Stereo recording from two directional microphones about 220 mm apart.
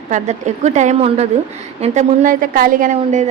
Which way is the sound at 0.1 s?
30° right (ahead or behind).